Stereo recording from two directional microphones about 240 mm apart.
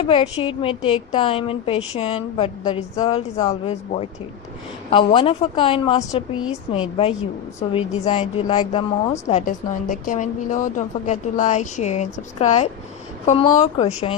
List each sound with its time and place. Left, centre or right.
0.0 s a woman's voice: left